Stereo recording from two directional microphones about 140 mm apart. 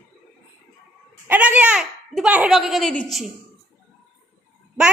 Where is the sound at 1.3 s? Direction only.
10° right (ahead or behind).